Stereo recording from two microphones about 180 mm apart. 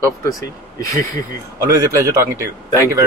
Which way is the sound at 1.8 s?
15° right (ahead or behind).